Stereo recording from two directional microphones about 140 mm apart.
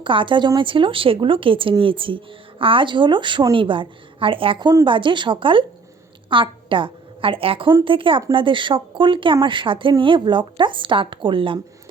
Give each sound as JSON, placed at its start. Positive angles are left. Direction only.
{"t": 0.0, "sound": "a woman's voice", "side_deg": -35}